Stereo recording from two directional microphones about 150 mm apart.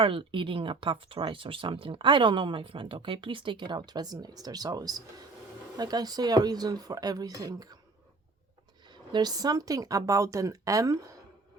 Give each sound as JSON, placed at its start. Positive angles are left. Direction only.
{"t": 0.0, "sound": "speech", "side_deg": -35}
{"t": 8.9, "sound": "speech", "side_deg": -30}